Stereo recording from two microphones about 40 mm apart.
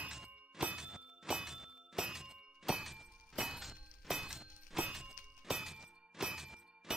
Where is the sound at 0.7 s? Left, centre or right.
Centre.